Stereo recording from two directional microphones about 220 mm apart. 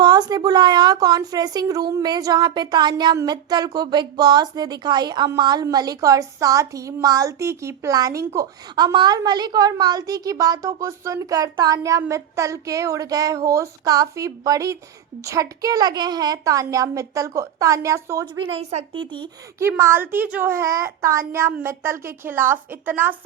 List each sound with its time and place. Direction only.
0.0 s a woman's voice: 20° right (ahead or behind)
18.4 s a woman's voice: 30° right (ahead or behind); by 23.1 s 10° right (ahead or behind)